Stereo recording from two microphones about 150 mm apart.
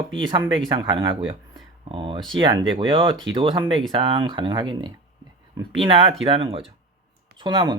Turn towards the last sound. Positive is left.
turn(degrees=-30)  # may be behind; listen again after turning